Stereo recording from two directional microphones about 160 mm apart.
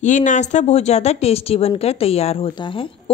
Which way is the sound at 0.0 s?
50° left (ahead or behind).